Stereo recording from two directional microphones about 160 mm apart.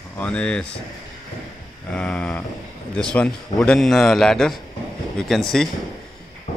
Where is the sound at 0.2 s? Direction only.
5° left (ahead or behind).